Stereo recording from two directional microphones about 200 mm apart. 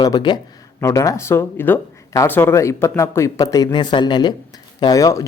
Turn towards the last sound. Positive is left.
turn(degrees=15)  # may be behind; listen again after turning